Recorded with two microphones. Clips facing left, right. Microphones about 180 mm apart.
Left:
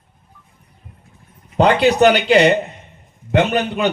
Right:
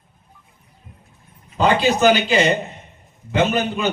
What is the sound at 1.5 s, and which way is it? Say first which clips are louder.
A man's voice: left 4 dB; 65° left (ahead or behind).